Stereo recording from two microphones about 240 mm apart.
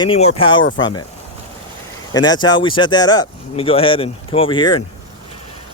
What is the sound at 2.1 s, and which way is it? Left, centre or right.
Speech, centre.